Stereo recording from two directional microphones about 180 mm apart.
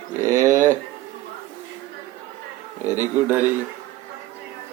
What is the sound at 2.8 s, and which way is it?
Speech, 10° right (ahead or behind).